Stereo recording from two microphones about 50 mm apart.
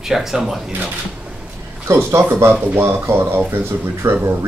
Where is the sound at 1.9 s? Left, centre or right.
Right.